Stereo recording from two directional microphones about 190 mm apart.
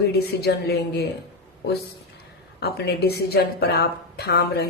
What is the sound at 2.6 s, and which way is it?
A woman's voice, 55° left (ahead or behind).